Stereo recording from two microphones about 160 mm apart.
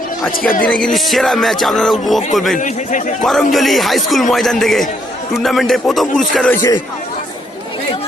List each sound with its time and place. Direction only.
0.6 s speech: 5° left (ahead or behind)
0.9 s music: centre (ahead or behind)
2.6 s a man's voice: 50° left (ahead or behind)
3.2 s music: centre (ahead or behind)
6.5 s speech: 15° left (ahead or behind)